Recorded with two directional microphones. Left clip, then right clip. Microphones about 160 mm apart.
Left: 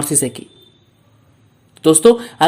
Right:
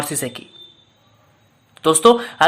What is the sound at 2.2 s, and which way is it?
Speech, 20° left (ahead or behind).